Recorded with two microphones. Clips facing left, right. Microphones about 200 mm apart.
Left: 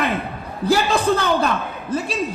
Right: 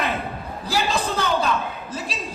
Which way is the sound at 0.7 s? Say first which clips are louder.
Left 7 dB; 55° left (ahead or behind).